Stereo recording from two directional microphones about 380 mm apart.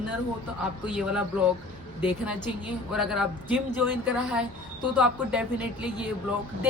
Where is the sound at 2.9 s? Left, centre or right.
Centre.